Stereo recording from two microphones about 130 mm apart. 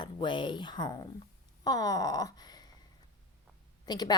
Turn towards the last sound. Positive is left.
turn(degrees=35)  # may be behind; listen again after turning